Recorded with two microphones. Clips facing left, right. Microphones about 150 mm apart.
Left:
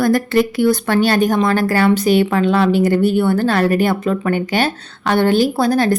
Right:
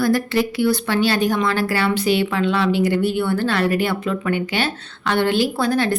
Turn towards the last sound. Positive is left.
turn(degrees=40)  # may be behind; listen again after turning